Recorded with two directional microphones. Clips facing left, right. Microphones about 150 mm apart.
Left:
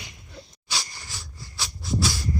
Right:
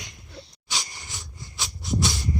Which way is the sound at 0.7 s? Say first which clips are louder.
Even; 20° right (ahead or behind).